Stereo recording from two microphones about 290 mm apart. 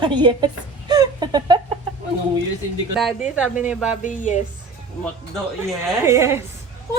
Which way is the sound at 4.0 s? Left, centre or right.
Left.